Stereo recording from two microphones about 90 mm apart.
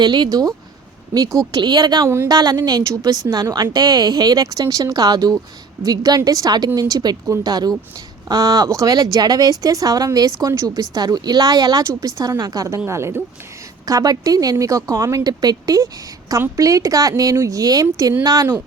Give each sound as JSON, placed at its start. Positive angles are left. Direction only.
{"t": 0.0, "sound": "speech", "side_deg": -55}
{"t": 1.6, "sound": "speech", "side_deg": -55}
{"t": 12.9, "sound": "speech", "side_deg": -30}
{"t": 13.8, "sound": "speech", "side_deg": -45}